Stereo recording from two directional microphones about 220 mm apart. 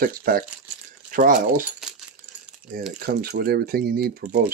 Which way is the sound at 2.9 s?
45° right (ahead or behind).